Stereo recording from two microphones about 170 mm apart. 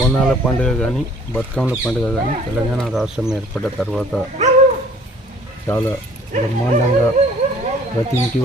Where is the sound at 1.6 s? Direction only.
10° right (ahead or behind).